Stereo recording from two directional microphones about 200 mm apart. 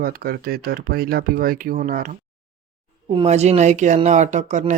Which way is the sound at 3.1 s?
30° right (ahead or behind).